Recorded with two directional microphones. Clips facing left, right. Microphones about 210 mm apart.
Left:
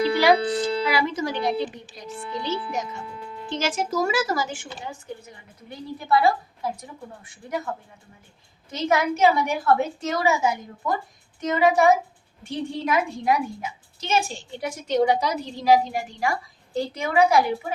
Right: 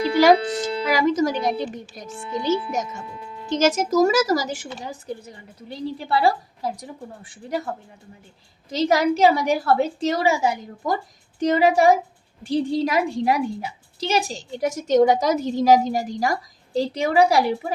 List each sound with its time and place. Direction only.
0.2 s a woman's voice: 45° right (ahead or behind)
8.7 s a woman's voice: 35° right (ahead or behind)